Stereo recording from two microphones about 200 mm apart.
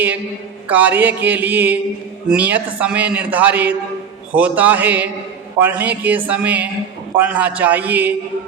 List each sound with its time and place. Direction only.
0.7 s a man's voice: 10° right (ahead or behind)